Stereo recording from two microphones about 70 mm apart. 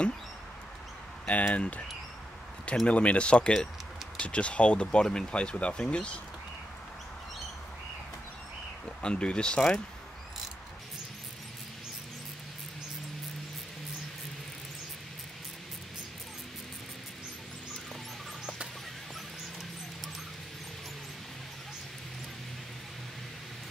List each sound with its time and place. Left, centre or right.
1.2 s speech: centre
2.9 s speech: centre
8.8 s speech: centre